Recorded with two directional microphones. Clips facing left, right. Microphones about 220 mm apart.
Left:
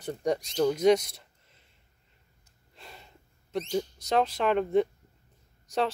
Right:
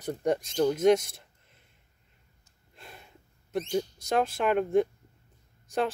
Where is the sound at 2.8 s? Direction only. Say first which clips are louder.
Even; 5° right (ahead or behind).